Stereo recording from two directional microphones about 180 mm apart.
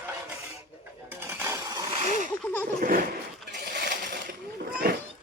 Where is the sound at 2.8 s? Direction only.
50° right (ahead or behind).